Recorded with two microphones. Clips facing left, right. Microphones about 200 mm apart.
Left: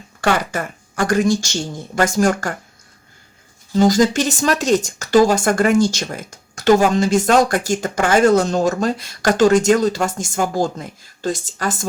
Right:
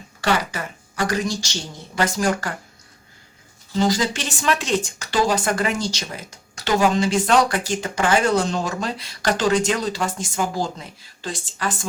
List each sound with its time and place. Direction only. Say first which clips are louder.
0.2 s speech: left 3 dB; 50° left (ahead or behind)
3.7 s speech: left 7 dB; 45° left (ahead or behind)